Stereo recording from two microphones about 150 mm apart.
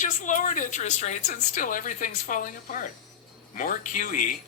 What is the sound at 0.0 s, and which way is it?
Speech, 55° left (ahead or behind).